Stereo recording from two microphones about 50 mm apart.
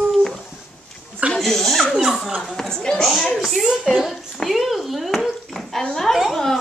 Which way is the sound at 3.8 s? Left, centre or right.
Centre.